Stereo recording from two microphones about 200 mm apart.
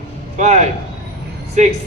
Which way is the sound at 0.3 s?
35° right (ahead or behind).